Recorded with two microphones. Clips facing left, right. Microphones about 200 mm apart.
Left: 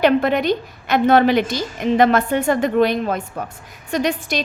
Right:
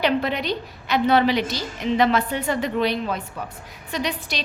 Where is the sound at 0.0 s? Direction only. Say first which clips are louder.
Left 6 dB; 50° left (ahead or behind).